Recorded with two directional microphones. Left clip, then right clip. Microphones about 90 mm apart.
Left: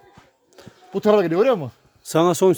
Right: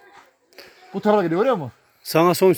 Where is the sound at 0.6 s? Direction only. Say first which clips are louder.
Right 2 dB; 30° left (ahead or behind).